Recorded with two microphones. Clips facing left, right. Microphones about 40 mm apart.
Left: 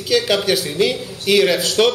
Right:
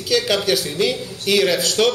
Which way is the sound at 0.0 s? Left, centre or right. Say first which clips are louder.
Left 2 dB; centre.